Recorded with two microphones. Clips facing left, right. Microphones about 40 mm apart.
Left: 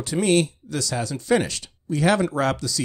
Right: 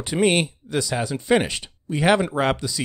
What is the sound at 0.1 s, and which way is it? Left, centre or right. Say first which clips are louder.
Speech: even; right.